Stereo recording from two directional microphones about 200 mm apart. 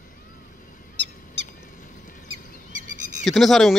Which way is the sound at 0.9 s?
60° right (ahead or behind).